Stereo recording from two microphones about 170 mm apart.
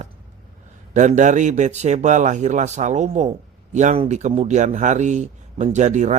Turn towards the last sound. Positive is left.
turn(degrees=-45)  # may be behind; listen again after turning